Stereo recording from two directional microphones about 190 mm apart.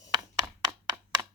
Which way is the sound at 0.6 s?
20° right (ahead or behind).